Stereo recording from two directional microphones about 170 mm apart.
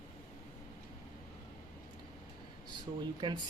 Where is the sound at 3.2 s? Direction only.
25° right (ahead or behind).